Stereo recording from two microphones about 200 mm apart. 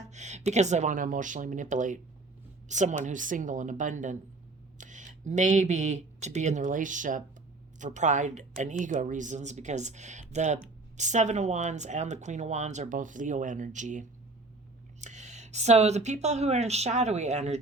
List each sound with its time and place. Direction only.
0.1 s speech: 35° right (ahead or behind)